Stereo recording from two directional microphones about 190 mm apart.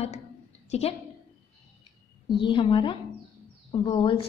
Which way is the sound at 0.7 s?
30° left (ahead or behind).